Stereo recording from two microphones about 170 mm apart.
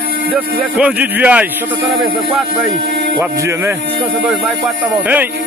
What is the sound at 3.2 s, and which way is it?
Speech, 15° right (ahead or behind).